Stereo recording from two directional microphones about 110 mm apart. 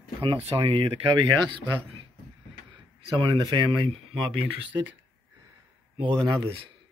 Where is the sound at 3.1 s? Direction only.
45° right (ahead or behind).